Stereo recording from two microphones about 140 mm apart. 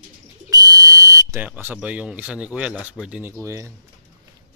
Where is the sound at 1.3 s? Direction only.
10° right (ahead or behind).